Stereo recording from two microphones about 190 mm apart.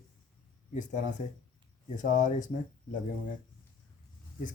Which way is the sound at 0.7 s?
40° left (ahead or behind).